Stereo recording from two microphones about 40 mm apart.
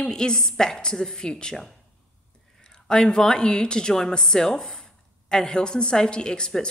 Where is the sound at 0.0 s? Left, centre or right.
Centre.